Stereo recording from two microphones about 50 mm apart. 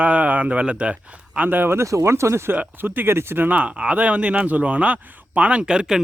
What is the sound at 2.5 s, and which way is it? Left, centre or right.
Speech, right.